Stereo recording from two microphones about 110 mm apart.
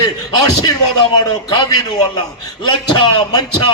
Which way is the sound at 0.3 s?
45° left (ahead or behind).